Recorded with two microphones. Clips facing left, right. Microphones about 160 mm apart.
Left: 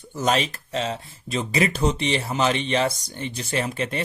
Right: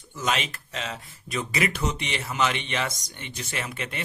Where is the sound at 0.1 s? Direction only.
40° left (ahead or behind).